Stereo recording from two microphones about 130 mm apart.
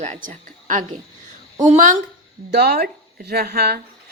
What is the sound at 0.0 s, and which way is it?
A woman's voice, 75° right (ahead or behind).